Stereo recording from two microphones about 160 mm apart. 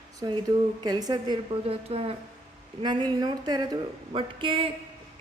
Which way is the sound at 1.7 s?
40° right (ahead or behind).